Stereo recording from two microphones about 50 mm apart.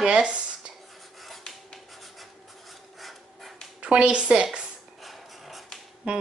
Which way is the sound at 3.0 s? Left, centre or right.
Centre.